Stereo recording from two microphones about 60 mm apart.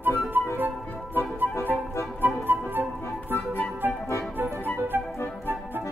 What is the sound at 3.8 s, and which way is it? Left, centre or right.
Music, right.